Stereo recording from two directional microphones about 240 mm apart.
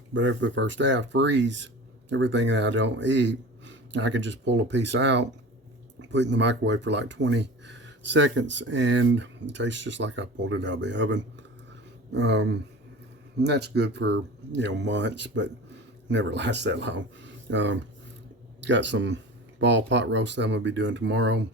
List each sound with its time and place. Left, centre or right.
0.1 s speech: right